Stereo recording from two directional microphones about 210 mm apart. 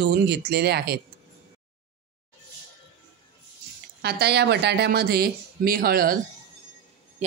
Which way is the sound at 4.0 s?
50° right (ahead or behind).